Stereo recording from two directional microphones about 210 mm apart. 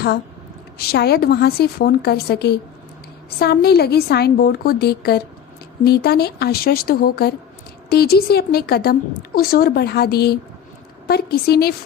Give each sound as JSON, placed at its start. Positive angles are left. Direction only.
{"t": 0.8, "sound": "a woman's voice", "side_deg": 50}